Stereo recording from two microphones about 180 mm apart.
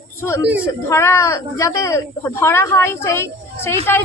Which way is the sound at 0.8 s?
15° left (ahead or behind).